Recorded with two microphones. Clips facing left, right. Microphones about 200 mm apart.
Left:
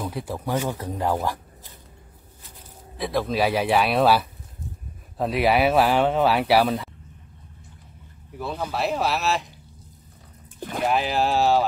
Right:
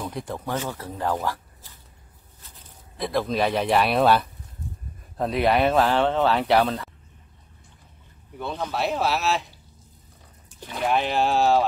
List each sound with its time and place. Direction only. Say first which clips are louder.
0.0 s speech: left 2 dB; 5° left (ahead or behind)
3.0 s speech: left 1 dB; centre (ahead or behind)
8.4 s speech: even; 5° left (ahead or behind)
10.6 s speech: left 2 dB; 45° left (ahead or behind)
10.9 s speech: right 1 dB; centre (ahead or behind)